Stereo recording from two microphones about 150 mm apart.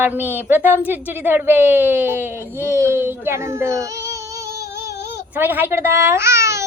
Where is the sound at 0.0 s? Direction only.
10° right (ahead or behind).